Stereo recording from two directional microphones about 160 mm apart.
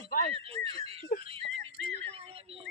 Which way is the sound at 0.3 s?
40° right (ahead or behind).